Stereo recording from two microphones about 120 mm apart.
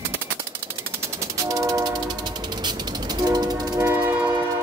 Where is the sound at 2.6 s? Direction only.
35° right (ahead or behind).